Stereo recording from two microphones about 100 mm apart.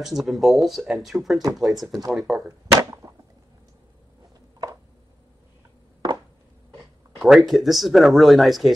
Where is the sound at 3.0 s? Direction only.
40° right (ahead or behind).